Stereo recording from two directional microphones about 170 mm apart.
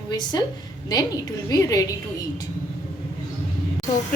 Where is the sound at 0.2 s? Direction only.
25° left (ahead or behind).